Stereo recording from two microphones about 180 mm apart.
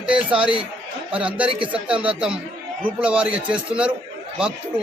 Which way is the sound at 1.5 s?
30° right (ahead or behind).